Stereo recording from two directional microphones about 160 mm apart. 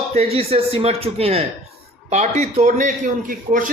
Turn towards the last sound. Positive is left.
turn(degrees=-55)  # may be behind; listen again after turning